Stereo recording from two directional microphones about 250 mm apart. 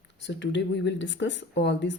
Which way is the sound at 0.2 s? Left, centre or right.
Left.